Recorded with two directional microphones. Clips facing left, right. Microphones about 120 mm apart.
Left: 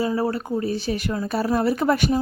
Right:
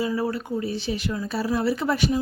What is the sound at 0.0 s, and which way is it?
Speech, 40° left (ahead or behind).